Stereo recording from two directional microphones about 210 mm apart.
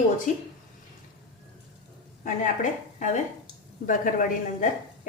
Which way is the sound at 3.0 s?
35° left (ahead or behind).